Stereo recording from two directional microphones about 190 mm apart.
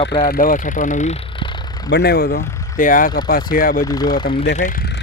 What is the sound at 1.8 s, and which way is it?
Speech, 60° left (ahead or behind).